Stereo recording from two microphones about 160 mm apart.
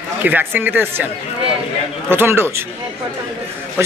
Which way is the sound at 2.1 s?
15° right (ahead or behind).